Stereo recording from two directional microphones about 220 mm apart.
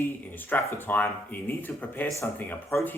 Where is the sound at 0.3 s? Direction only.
10° left (ahead or behind).